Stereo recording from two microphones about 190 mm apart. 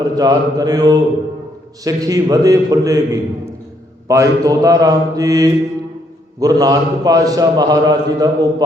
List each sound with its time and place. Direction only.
0.0 s a man's voice: 20° right (ahead or behind)